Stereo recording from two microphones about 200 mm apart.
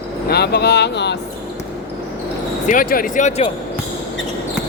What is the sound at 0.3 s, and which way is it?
Speech, 55° left (ahead or behind).